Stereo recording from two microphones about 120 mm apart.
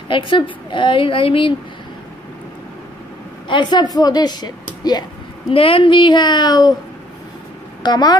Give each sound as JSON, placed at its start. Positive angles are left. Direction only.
{"t": 0.1, "sound": "a woman's voice", "side_deg": 45}
{"t": 3.4, "sound": "a woman's voice", "side_deg": 40}
{"t": 5.5, "sound": "a woman's voice", "side_deg": 50}
{"t": 7.8, "sound": "a woman's voice", "side_deg": 35}